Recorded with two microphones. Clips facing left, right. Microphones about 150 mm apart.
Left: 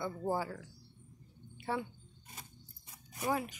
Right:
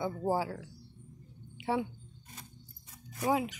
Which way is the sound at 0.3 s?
10° right (ahead or behind).